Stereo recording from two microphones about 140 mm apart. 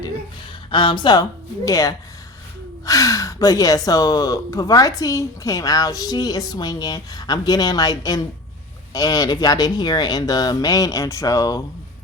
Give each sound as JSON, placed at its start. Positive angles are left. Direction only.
{"t": 0.7, "sound": "speech", "side_deg": 35}